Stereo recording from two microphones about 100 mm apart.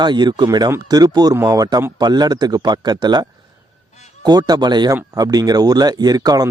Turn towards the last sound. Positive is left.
turn(degrees=-40)  # may be behind; listen again after turning